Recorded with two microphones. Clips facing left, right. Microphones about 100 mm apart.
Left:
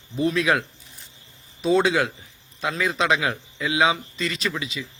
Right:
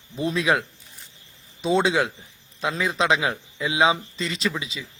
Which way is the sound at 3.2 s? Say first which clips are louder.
Even; 20° right (ahead or behind).